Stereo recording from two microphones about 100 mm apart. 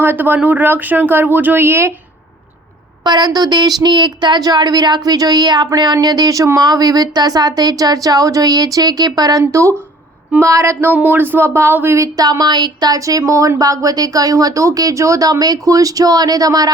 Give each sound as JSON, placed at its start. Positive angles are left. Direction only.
{"t": 0.0, "sound": "speech", "side_deg": -20}
{"t": 3.0, "sound": "a woman's voice", "side_deg": -45}